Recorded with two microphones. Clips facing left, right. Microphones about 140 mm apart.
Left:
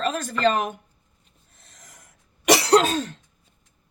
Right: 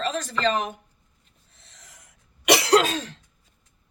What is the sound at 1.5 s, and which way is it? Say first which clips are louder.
Cough: left 2 dB; 45° left (ahead or behind).